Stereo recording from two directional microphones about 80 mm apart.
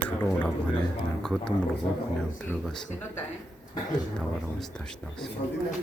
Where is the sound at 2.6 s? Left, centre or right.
Centre.